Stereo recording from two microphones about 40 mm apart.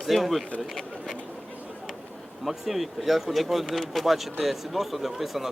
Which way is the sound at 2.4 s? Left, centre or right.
Centre.